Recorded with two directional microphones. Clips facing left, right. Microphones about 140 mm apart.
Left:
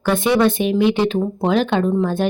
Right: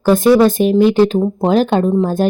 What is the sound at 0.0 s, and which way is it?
Speech, 40° right (ahead or behind).